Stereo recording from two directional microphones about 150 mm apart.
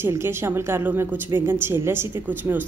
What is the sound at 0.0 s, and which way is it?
A woman's voice, 15° right (ahead or behind).